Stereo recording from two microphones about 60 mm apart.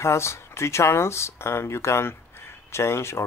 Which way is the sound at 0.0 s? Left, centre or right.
Left.